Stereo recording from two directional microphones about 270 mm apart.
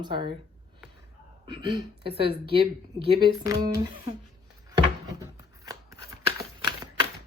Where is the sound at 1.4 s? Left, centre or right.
Centre.